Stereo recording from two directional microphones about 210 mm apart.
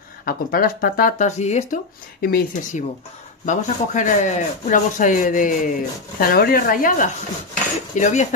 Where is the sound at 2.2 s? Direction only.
45° left (ahead or behind).